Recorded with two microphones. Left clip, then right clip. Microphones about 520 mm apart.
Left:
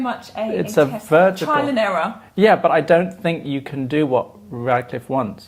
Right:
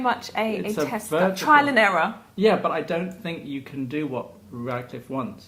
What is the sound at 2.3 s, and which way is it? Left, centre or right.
Speech, left.